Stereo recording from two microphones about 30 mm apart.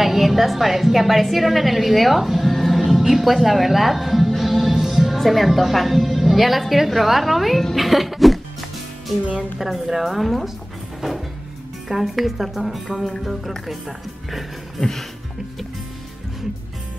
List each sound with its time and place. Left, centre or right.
0.0 s a woman's voice: centre
7.7 s music: centre
9.6 s speech: centre
11.9 s a woman's voice: centre
14.8 s music: centre